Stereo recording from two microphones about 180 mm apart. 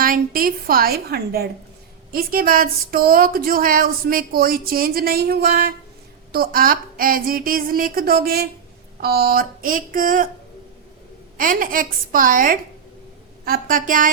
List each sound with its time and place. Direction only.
0.0 s a woman's voice: 55° right (ahead or behind)
11.3 s a woman's voice: 50° right (ahead or behind)